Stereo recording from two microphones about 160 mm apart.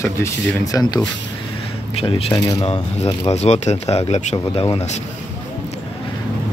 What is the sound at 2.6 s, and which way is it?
Speech, 40° left (ahead or behind).